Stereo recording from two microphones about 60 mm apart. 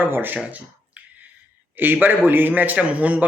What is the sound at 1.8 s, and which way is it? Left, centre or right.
A man's voice, right.